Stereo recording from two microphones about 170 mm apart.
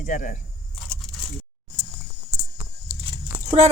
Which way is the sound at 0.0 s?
50° left (ahead or behind).